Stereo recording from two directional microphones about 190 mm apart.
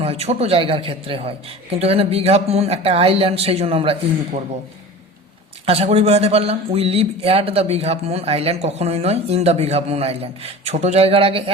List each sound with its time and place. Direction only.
0.0 s speech: 30° right (ahead or behind)
5.6 s speech: 30° right (ahead or behind)